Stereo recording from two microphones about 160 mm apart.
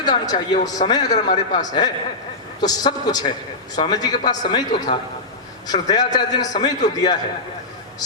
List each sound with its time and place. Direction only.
0.0 s a man's voice: 25° left (ahead or behind)